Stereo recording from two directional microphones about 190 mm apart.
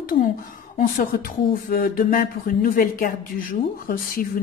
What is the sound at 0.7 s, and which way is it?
Speech, 45° left (ahead or behind).